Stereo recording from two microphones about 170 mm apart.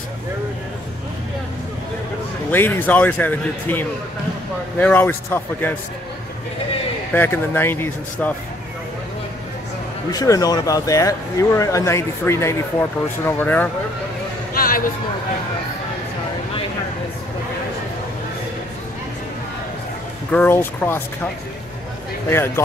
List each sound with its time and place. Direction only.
2.5 s speech: 10° left (ahead or behind)
7.2 s speech: 10° left (ahead or behind)
10.1 s speech: 20° left (ahead or behind)
14.5 s a sound: 55° left (ahead or behind)
20.2 s speech: 10° left (ahead or behind)